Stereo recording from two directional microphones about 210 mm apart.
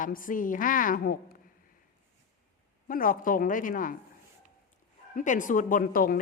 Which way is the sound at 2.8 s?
40° left (ahead or behind).